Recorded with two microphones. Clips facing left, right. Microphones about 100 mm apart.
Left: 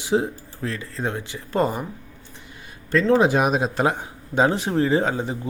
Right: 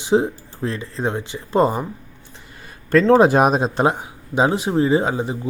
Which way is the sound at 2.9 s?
45° right (ahead or behind).